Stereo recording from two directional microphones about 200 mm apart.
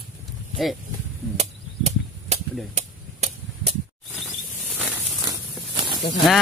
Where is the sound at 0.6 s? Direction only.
Centre (ahead or behind).